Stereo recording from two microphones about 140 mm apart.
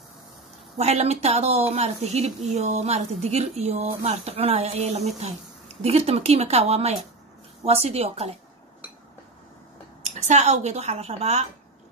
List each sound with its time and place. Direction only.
0.7 s speech: 50° right (ahead or behind)
10.0 s speech: 55° right (ahead or behind)